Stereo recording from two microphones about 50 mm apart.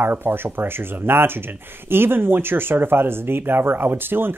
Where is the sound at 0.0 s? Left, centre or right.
Right.